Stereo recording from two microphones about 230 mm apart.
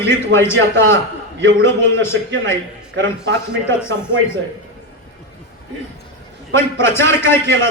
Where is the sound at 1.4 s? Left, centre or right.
Right.